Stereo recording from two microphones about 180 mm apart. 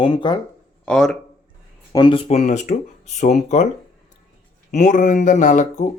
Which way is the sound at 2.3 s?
40° left (ahead or behind).